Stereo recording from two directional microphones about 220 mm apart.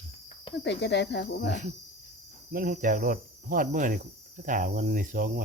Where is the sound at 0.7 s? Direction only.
50° left (ahead or behind).